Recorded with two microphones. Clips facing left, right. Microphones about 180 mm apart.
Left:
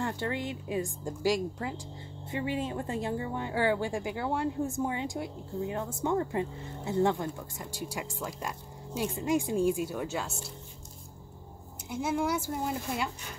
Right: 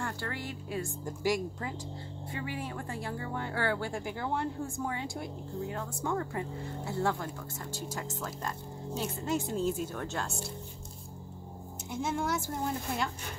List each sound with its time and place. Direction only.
0.0 s speech: 20° left (ahead or behind)
2.2 s speech: 20° left (ahead or behind); by 10.4 s 5° left (ahead or behind)
11.9 s speech: 10° left (ahead or behind)